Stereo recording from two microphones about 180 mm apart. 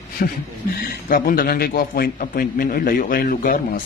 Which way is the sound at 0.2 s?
60° left (ahead or behind).